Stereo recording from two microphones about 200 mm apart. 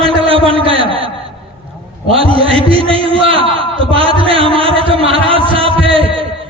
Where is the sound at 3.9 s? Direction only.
25° right (ahead or behind).